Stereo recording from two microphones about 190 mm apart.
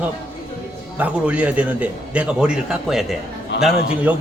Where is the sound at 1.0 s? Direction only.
5° right (ahead or behind).